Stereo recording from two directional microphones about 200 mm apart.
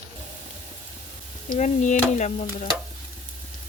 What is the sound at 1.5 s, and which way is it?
Speech, 35° left (ahead or behind).